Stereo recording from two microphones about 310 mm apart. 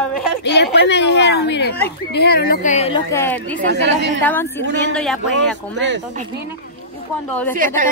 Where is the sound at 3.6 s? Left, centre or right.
Right.